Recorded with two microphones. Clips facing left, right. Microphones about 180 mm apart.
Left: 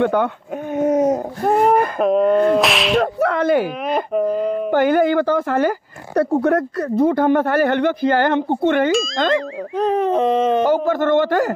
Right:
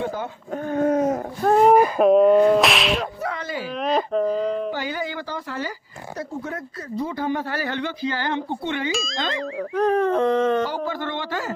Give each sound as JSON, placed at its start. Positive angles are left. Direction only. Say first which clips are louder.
{"t": 0.0, "sound": "speech", "louder": "left 10 dB", "side_deg": 65}
{"t": 0.7, "sound": "a sound", "louder": "left 4 dB", "side_deg": 20}
{"t": 2.0, "sound": "speech", "louder": "right 1 dB", "side_deg": 0}
{"t": 3.2, "sound": "speech", "louder": "left 12 dB", "side_deg": 60}
{"t": 4.1, "sound": "a sound", "louder": "left 3 dB", "side_deg": 5}
{"t": 4.6, "sound": "speech", "louder": "left 13 dB", "side_deg": 55}
{"t": 9.8, "sound": "speech", "louder": "left 3 dB", "side_deg": 15}
{"t": 10.7, "sound": "speech", "louder": "left 11 dB", "side_deg": 50}